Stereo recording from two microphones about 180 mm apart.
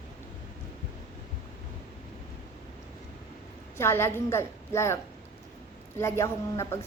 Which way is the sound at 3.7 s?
15° left (ahead or behind).